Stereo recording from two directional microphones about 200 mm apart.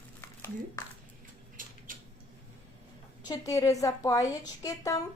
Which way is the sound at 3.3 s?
15° left (ahead or behind).